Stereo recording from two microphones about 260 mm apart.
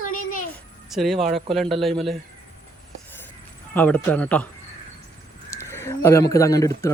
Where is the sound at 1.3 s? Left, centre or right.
Right.